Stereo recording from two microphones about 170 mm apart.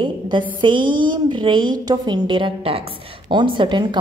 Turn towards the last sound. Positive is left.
turn(degrees=-30)  # may be behind; listen again after turning